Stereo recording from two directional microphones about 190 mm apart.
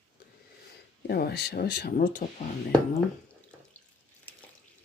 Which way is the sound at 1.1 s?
60° left (ahead or behind).